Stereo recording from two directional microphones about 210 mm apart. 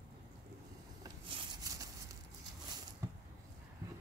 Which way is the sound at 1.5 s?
15° right (ahead or behind).